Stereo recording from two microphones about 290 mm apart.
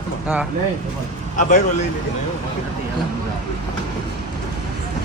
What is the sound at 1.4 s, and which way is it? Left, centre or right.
Speech, left.